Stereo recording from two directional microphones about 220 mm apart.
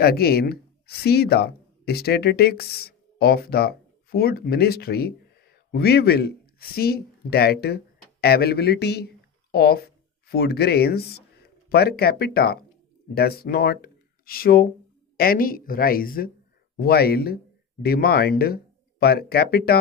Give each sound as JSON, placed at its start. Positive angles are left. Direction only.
{"t": 0.0, "sound": "speech", "side_deg": 45}